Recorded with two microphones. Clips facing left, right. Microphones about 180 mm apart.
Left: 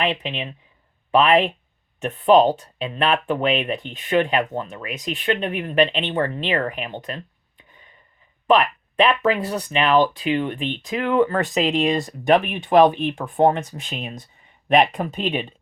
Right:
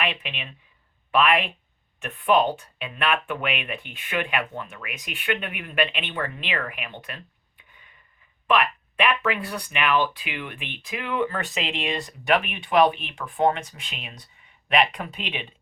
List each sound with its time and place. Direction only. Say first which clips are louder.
0.0 s speech: left 6 dB; 35° left (ahead or behind)
8.4 s speech: left 5 dB; 35° left (ahead or behind)